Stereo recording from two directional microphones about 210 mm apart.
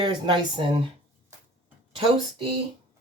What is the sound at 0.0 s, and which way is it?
Speech, 20° right (ahead or behind).